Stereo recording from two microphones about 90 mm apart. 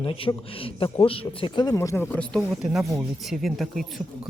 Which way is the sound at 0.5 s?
90° left.